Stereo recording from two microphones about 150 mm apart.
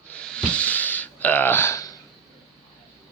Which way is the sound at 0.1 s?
5° left (ahead or behind).